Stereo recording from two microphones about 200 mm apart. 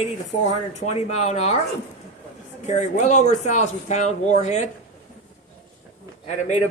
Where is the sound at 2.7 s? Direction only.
35° left (ahead or behind).